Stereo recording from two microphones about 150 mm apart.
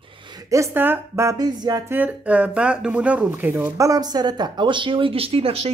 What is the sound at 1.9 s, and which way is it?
Speech, 10° right (ahead or behind).